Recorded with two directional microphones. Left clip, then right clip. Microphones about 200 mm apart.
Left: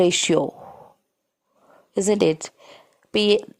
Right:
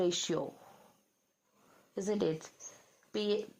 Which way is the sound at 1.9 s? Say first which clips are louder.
Left 15 dB; 40° left (ahead or behind).